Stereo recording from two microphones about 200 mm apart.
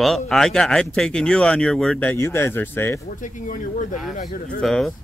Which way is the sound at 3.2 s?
40° left (ahead or behind).